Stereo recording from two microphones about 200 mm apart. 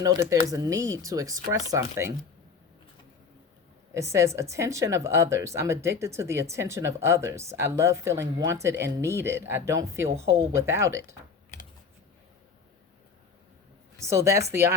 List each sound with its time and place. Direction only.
0.0 s speech: 15° right (ahead or behind)
3.9 s speech: 15° right (ahead or behind)
14.0 s speech: 15° right (ahead or behind)